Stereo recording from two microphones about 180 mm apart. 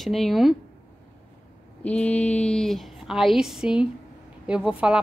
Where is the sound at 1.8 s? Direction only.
5° left (ahead or behind).